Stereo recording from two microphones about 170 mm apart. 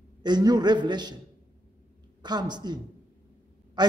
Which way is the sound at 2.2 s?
25° right (ahead or behind).